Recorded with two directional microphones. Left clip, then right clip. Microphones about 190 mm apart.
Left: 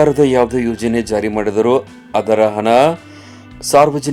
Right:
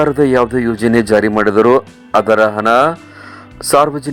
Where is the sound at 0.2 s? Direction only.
20° right (ahead or behind).